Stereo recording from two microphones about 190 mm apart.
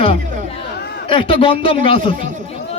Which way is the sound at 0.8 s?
60° left (ahead or behind).